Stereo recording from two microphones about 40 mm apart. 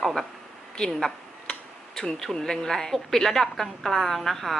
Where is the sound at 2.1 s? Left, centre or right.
Centre.